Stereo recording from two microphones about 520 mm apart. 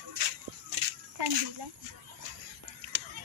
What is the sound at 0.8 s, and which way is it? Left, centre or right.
Children playing, right.